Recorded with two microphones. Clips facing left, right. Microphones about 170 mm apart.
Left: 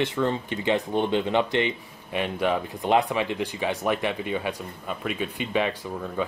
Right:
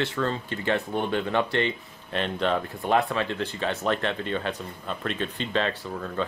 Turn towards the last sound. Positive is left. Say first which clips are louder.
# left 1 dB
turn(degrees=10)  # may be behind; listen again after turning